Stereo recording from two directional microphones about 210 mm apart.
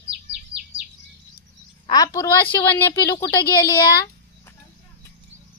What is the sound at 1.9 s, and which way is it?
A woman's voice, 15° left (ahead or behind).